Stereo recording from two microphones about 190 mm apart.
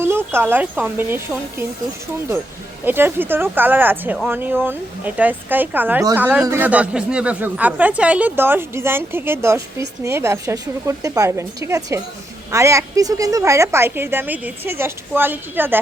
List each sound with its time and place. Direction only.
0.0 s speech: 10° right (ahead or behind)
2.8 s speech: 10° right (ahead or behind)